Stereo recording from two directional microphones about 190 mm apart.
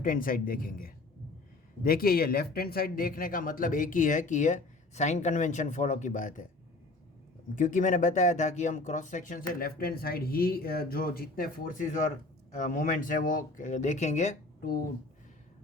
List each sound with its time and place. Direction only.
0.0 s speech: 50° left (ahead or behind)
7.5 s speech: 45° left (ahead or behind)